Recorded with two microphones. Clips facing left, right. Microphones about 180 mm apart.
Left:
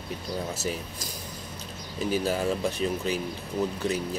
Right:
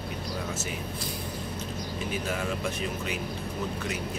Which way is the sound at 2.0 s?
35° left (ahead or behind).